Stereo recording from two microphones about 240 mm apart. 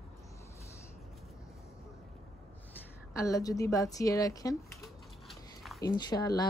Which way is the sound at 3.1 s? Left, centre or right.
Centre.